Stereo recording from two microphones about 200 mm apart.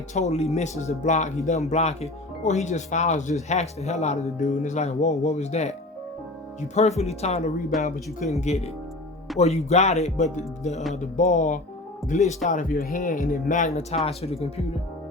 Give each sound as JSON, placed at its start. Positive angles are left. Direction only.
{"t": 0.1, "sound": "speech", "side_deg": 35}